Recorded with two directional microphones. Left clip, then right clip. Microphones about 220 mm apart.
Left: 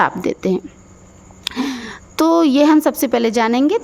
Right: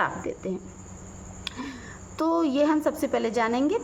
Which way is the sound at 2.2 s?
45° left (ahead or behind).